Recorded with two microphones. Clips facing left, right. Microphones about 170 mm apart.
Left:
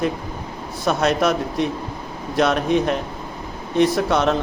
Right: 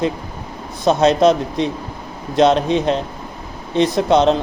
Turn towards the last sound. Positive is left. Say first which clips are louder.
# right 5 dB
turn(degrees=-20)  # may be behind; listen again after turning